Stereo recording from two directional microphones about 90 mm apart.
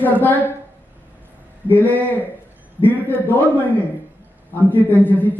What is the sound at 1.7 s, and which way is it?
A man's voice, 20° left (ahead or behind).